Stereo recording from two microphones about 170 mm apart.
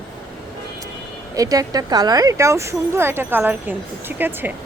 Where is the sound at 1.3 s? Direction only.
20° right (ahead or behind).